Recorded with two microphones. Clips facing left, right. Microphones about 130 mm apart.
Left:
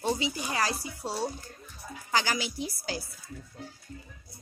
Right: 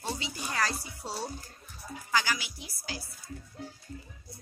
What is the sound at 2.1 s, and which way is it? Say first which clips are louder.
Speech: left 2 dB; 30° left (ahead or behind).